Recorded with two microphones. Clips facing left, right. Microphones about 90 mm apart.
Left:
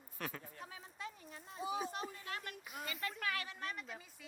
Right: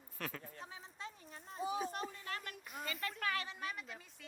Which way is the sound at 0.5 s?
30° right (ahead or behind).